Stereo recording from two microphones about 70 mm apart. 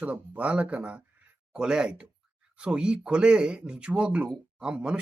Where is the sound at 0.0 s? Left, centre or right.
Centre.